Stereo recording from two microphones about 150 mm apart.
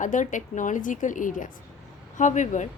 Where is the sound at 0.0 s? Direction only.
55° left (ahead or behind).